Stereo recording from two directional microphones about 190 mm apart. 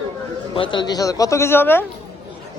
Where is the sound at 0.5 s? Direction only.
25° left (ahead or behind).